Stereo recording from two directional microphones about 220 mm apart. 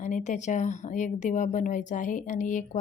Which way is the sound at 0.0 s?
35° left (ahead or behind).